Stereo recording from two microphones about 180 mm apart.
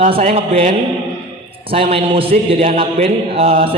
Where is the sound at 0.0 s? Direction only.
35° right (ahead or behind).